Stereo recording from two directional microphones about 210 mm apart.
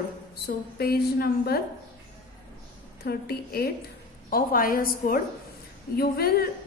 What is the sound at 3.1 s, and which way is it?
A woman's voice, 45° left (ahead or behind).